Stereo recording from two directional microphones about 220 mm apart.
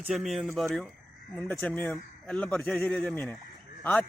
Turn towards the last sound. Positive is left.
turn(degrees=5)  # may be behind; listen again after turning